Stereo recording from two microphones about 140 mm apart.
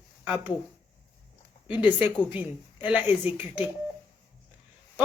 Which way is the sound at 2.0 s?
10° right (ahead or behind).